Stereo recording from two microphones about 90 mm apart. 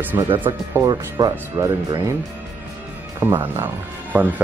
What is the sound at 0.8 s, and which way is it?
Speech, 45° right (ahead or behind).